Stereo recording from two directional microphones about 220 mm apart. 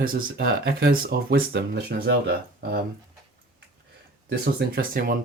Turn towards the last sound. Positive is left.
turn(degrees=-40)  # may be behind; listen again after turning